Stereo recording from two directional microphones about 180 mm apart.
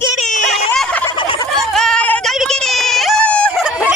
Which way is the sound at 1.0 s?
30° left (ahead or behind).